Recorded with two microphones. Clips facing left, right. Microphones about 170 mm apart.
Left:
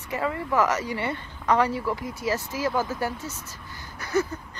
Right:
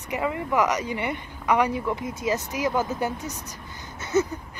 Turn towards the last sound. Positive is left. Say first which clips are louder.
# right 2 dB
turn(degrees=-20)  # may be behind; listen again after turning